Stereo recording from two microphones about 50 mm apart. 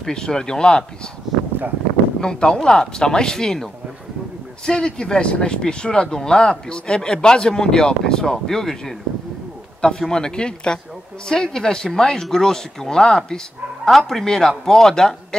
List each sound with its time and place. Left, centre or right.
0.0 s speech: centre
2.1 s speech: centre
4.6 s speech: centre